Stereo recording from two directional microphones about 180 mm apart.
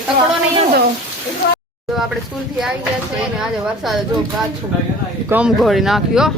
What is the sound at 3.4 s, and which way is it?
Speech, centre (ahead or behind).